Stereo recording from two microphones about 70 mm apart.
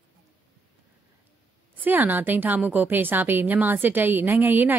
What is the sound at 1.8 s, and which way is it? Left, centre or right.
A woman's voice, right.